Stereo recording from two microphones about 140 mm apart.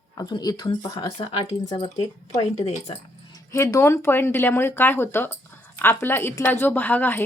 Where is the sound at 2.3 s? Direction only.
55° left (ahead or behind).